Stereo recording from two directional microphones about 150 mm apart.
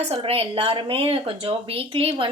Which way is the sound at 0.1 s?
40° right (ahead or behind).